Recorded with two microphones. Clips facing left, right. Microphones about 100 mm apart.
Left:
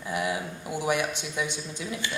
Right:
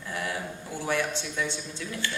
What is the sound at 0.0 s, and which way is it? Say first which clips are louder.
A man's voice: left 4 dB; 15° left (ahead or behind).